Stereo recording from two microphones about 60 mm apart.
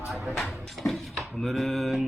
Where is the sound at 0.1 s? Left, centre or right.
Centre.